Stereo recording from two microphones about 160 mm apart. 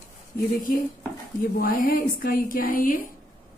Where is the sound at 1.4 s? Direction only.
60° left (ahead or behind).